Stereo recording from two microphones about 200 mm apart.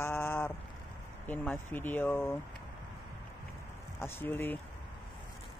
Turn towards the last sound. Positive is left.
turn(degrees=10)  # may be behind; listen again after turning